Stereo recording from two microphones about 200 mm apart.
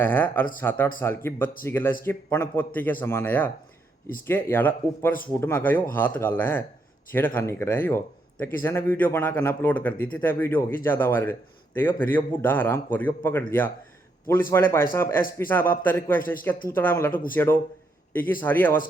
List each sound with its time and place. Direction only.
0.0 s a man's voice: 10° left (ahead or behind)
14.5 s a man's voice: 10° left (ahead or behind)
17.1 s speech: 45° left (ahead or behind)
17.3 s a man's voice: 10° left (ahead or behind)